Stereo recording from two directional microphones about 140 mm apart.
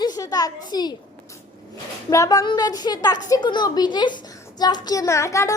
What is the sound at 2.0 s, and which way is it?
A child's voice, 25° left (ahead or behind).